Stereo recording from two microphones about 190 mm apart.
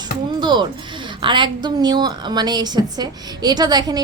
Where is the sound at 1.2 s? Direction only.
25° right (ahead or behind).